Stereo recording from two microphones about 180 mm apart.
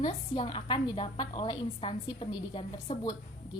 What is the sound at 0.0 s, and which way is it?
A woman's voice, 35° left (ahead or behind).